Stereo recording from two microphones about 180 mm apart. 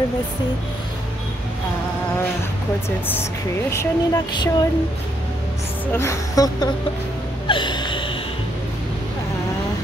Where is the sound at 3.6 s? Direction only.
15° left (ahead or behind).